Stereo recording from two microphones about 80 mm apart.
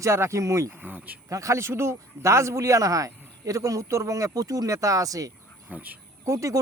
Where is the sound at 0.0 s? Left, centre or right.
Right.